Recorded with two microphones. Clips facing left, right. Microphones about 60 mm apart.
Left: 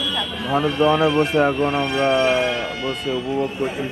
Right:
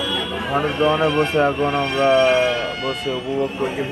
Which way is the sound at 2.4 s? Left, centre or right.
Centre.